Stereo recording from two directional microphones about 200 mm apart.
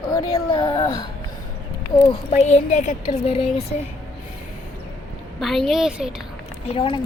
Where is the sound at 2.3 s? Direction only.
35° left (ahead or behind).